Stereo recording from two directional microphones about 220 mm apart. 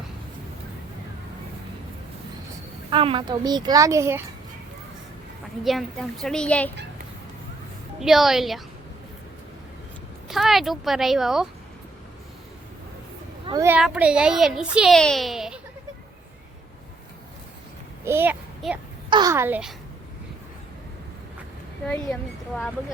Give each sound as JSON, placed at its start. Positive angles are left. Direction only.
{"t": 2.9, "sound": "a child's voice", "side_deg": -25}
{"t": 5.6, "sound": "a child's voice", "side_deg": 0}
{"t": 7.9, "sound": "a child's voice", "side_deg": 0}
{"t": 10.2, "sound": "a child's voice", "side_deg": 0}
{"t": 13.4, "sound": "speech", "side_deg": -15}
{"t": 13.7, "sound": "a child's voice", "side_deg": -5}
{"t": 18.0, "sound": "a sound", "side_deg": -10}
{"t": 19.1, "sound": "a child's voice", "side_deg": -15}
{"t": 21.8, "sound": "a child's voice", "side_deg": 5}